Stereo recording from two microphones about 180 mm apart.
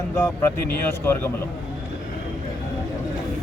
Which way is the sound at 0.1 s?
15° left (ahead or behind).